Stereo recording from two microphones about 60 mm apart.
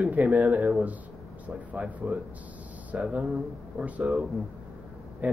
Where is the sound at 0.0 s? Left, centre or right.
Right.